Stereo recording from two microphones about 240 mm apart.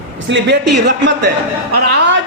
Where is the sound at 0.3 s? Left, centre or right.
Right.